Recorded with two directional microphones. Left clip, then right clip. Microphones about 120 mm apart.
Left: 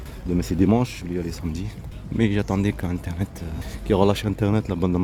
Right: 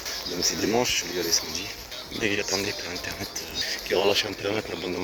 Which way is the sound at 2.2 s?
30° left (ahead or behind).